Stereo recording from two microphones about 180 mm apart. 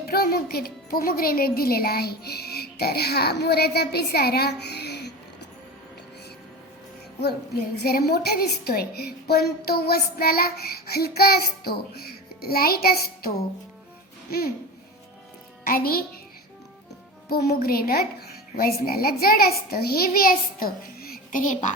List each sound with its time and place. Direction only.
0.0 s a woman's voice: 60° left (ahead or behind)
7.8 s a woman's voice: 60° left (ahead or behind)
15.6 s a woman's voice: 55° left (ahead or behind)
17.2 s a woman's voice: 60° left (ahead or behind); by 21.7 s 45° left (ahead or behind)